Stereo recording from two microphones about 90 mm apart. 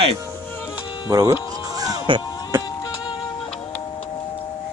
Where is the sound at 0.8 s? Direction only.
55° left (ahead or behind).